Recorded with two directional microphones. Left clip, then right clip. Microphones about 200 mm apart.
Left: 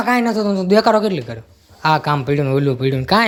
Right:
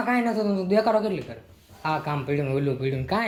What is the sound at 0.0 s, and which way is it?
Speech, 35° left (ahead or behind).